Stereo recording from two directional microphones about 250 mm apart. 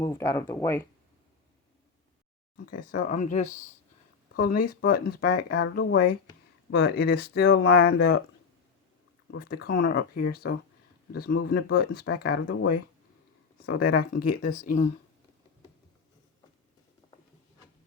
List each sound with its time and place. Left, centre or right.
0.0 s speech: centre
2.7 s speech: left
9.3 s speech: left
13.8 s speech: left